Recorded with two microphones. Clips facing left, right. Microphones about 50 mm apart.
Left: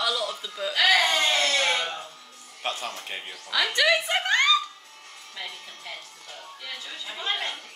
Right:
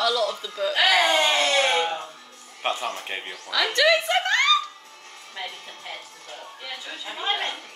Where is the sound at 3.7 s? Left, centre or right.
Centre.